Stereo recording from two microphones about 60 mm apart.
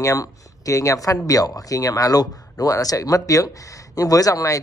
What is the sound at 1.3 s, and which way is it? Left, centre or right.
Speech, left.